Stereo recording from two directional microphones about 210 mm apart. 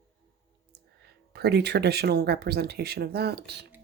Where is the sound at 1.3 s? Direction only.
50° right (ahead or behind).